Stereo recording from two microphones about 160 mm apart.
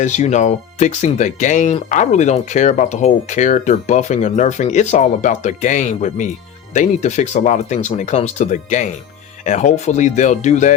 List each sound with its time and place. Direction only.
0.0 s speech: 45° left (ahead or behind)